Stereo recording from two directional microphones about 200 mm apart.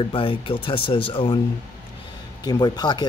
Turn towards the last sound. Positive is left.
turn(degrees=20)  # may be behind; listen again after turning